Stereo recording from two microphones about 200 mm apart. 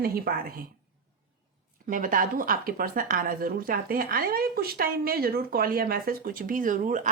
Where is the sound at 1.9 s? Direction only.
40° right (ahead or behind).